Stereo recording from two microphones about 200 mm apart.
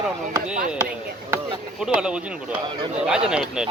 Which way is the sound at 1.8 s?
5° right (ahead or behind).